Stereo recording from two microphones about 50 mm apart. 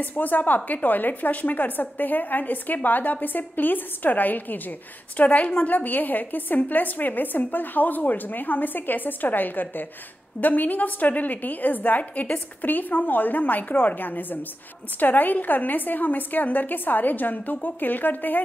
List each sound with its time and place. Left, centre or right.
0.2 s a woman's voice: left